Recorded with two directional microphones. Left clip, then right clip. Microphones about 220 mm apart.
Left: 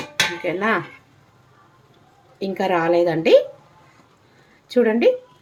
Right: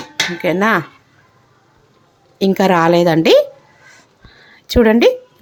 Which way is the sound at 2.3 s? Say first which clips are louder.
Right 8 dB; 45° right (ahead or behind).